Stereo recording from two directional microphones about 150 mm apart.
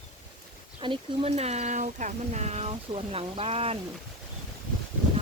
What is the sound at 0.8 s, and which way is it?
Speech, 35° right (ahead or behind).